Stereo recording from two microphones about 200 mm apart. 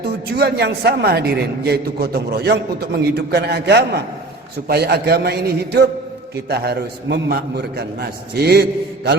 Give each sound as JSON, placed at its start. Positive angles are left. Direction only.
{"t": 0.0, "sound": "a man's voice", "side_deg": -55}